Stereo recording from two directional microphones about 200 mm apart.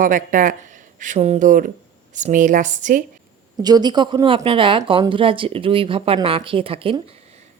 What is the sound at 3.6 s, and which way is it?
Speech, 20° right (ahead or behind).